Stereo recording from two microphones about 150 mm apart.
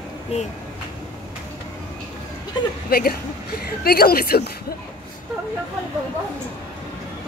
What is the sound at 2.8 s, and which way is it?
A woman's voice, 90° left.